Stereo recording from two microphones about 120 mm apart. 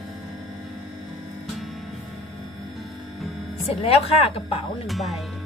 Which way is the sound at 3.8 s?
55° left (ahead or behind).